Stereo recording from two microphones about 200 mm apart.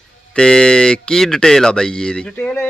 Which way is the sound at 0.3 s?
5° left (ahead or behind).